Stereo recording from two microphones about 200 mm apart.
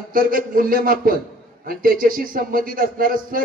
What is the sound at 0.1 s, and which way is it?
Speech, 45° right (ahead or behind).